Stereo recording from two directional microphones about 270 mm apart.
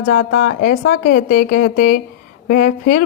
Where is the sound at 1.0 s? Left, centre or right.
Left.